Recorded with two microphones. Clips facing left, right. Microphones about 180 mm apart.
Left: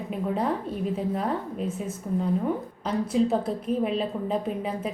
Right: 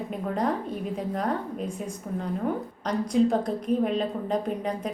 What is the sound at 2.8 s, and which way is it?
A woman's voice, 5° left (ahead or behind).